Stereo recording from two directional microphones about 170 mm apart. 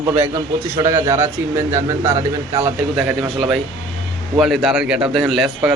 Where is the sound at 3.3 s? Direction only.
Centre (ahead or behind).